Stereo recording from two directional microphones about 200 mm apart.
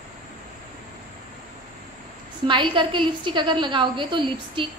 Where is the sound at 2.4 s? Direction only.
25° right (ahead or behind).